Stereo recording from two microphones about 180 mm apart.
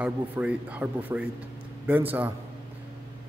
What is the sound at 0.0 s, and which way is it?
A man's voice, 5° right (ahead or behind).